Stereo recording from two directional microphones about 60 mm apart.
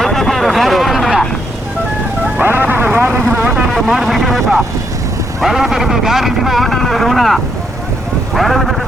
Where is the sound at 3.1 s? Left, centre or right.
Right.